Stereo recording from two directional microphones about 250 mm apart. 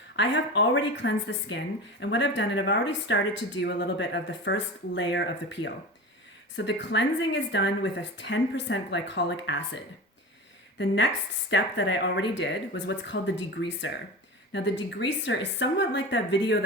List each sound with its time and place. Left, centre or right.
0.2 s speech: left
10.8 s speech: left